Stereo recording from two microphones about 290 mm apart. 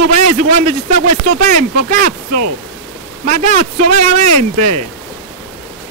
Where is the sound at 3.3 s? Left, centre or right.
Right.